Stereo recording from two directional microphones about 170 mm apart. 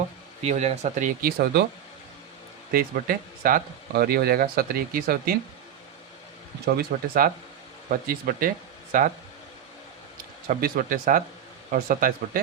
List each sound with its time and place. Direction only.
0.4 s speech: 40° right (ahead or behind); by 1.6 s 60° right (ahead or behind)
2.7 s speech: 60° right (ahead or behind)
6.7 s speech: 65° right (ahead or behind)
10.5 s speech: 55° right (ahead or behind)